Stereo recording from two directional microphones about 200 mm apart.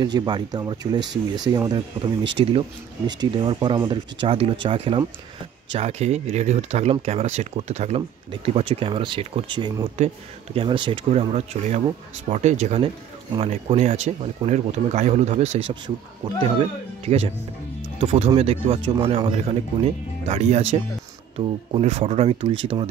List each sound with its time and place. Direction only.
0.0 s speech: 20° right (ahead or behind)
9.9 s speech: 30° right (ahead or behind)